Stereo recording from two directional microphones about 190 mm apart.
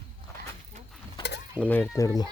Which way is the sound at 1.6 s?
10° left (ahead or behind).